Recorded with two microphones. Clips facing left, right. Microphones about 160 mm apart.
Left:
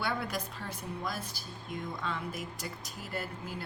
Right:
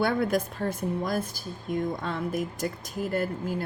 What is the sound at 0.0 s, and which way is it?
A woman's voice, 50° right (ahead or behind).